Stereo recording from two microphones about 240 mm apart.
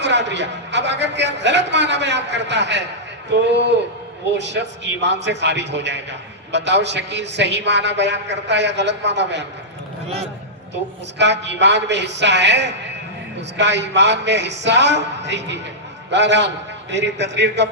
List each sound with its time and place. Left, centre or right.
0.0 s a man's voice: right
11.2 s a man's voice: right